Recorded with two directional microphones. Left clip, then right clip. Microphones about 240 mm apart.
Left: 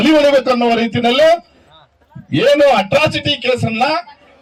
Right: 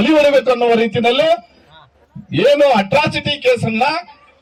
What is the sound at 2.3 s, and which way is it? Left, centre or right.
Speech, left.